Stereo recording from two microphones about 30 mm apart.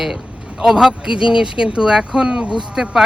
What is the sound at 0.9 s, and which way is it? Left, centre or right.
Speech, right.